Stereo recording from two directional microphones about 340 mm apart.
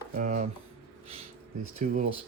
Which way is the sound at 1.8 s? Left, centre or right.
Right.